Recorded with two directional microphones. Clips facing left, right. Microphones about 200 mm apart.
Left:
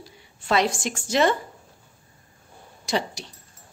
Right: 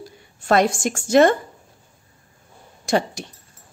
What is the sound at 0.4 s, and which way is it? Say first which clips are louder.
A woman's voice: right 5 dB; 45° right (ahead or behind).